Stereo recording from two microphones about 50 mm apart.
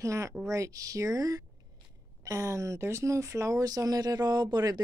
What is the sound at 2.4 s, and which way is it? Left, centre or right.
A woman's voice, right.